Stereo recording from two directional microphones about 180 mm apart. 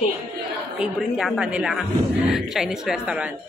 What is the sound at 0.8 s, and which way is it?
Speech, centre (ahead or behind).